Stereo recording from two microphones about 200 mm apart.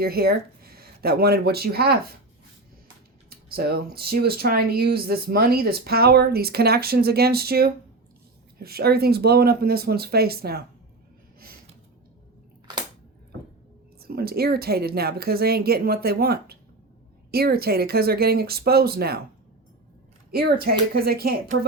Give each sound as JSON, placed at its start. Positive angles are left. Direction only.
{"t": 0.0, "sound": "speech", "side_deg": -50}
{"t": 3.2, "sound": "speech", "side_deg": -50}
{"t": 14.0, "sound": "speech", "side_deg": -50}
{"t": 20.3, "sound": "speech", "side_deg": -50}